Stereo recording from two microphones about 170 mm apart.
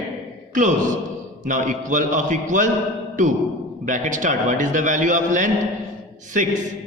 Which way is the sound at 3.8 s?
50° right (ahead or behind).